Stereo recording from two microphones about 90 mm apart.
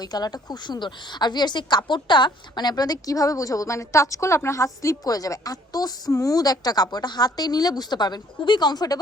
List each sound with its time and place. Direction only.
0.0 s a woman's voice: 45° left (ahead or behind)